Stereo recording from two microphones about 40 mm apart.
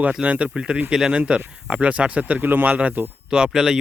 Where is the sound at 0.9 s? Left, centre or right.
Right.